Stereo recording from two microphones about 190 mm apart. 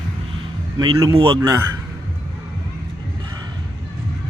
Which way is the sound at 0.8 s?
20° right (ahead or behind).